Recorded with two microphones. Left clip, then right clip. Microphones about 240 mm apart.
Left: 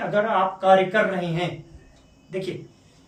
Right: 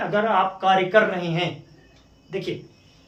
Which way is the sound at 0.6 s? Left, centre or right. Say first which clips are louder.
Left 1 dB; centre.